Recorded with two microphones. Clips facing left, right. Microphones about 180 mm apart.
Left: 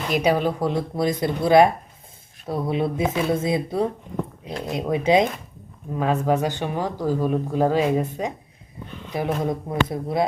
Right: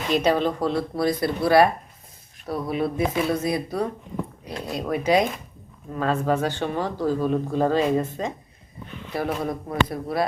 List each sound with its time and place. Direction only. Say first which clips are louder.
0.1 s speech: even; 10° left (ahead or behind)